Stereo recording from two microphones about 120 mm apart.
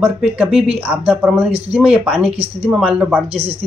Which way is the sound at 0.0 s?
10° right (ahead or behind).